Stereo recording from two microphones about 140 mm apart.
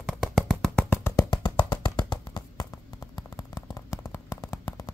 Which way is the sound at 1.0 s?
25° left (ahead or behind).